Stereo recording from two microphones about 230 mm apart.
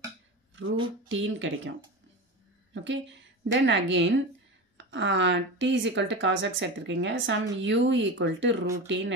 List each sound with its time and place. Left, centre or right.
1.0 s speech: right
2.7 s a woman's voice: right